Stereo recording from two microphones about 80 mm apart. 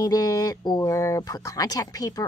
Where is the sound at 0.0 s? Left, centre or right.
Left.